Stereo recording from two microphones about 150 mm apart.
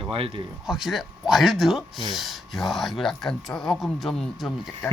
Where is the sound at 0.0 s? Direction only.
40° right (ahead or behind).